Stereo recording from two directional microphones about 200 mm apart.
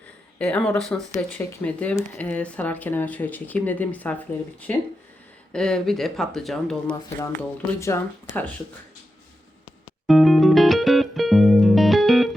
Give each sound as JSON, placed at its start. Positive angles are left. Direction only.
{"t": 0.3, "sound": "speech", "side_deg": 5}
{"t": 7.2, "sound": "speech", "side_deg": 15}
{"t": 10.1, "sound": "music", "side_deg": 0}